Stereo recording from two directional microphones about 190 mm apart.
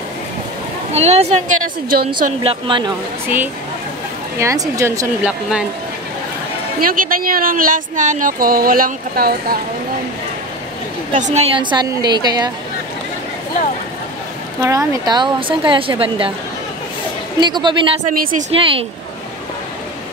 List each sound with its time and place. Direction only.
0.9 s a woman's voice: 35° right (ahead or behind)
2.4 s a woman's voice: 25° right (ahead or behind)
4.4 s speech: 15° right (ahead or behind)
6.8 s speech: 50° right (ahead or behind)
11.1 s a woman's voice: 40° right (ahead or behind)
11.5 s a woman's voice: 20° right (ahead or behind)
14.6 s a woman's voice: 15° right (ahead or behind)
17.4 s a woman's voice: 25° right (ahead or behind)
18.0 s speech: 45° right (ahead or behind)
18.5 s a woman's voice: 30° right (ahead or behind)